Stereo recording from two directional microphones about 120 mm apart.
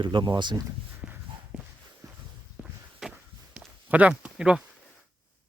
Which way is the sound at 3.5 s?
10° right (ahead or behind).